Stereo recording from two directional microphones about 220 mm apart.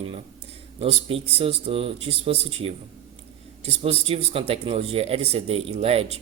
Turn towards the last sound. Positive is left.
turn(degrees=-25)  # may be behind; listen again after turning